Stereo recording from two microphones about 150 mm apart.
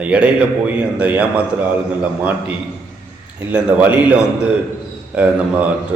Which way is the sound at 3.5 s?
10° right (ahead or behind).